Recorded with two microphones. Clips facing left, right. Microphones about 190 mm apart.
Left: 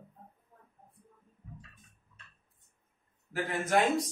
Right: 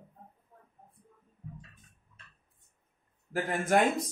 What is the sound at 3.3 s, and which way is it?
Speech, 50° right (ahead or behind).